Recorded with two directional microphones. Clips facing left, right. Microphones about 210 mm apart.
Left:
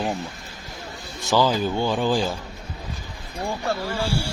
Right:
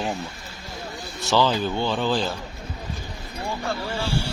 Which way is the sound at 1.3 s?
10° left (ahead or behind).